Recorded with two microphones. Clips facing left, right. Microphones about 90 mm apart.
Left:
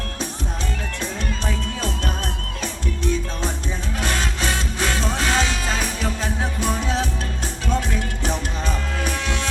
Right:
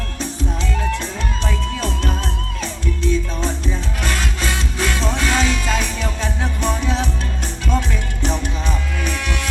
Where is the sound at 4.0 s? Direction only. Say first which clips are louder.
Left 1 dB; 35° left (ahead or behind).